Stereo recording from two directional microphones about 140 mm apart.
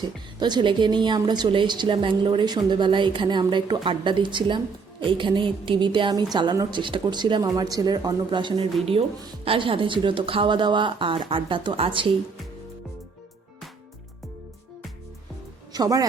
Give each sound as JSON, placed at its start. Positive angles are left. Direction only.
{"t": 0.0, "sound": "speech", "side_deg": -30}
{"t": 15.7, "sound": "speech", "side_deg": -25}